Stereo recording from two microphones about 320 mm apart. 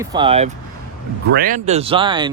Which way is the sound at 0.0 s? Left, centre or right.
Centre.